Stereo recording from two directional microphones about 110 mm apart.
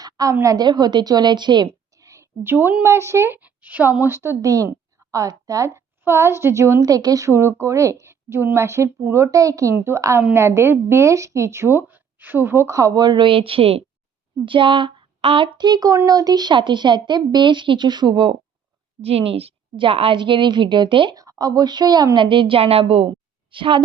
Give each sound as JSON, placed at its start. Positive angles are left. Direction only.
{"t": 0.0, "sound": "a woman's voice", "side_deg": -30}
{"t": 2.0, "sound": "a woman's voice", "side_deg": -25}
{"t": 3.4, "sound": "a woman's voice", "side_deg": -15}
{"t": 14.4, "sound": "a woman's voice", "side_deg": -50}
{"t": 19.0, "sound": "a woman's voice", "side_deg": -60}
{"t": 21.2, "sound": "a woman's voice", "side_deg": -35}